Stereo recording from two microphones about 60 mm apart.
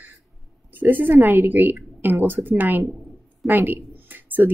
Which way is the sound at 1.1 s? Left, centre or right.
Right.